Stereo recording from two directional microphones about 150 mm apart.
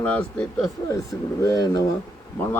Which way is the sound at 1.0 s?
25° left (ahead or behind).